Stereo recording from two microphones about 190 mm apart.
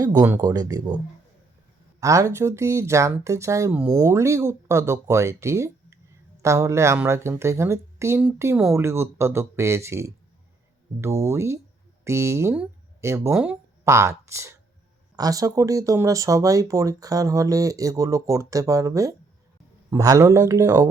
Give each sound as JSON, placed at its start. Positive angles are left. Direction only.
{"t": 0.0, "sound": "speech", "side_deg": -20}